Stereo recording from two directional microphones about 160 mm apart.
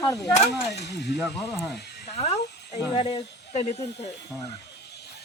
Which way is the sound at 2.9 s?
35° left (ahead or behind).